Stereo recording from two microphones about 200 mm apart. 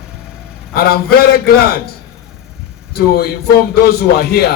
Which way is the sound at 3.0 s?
50° left (ahead or behind).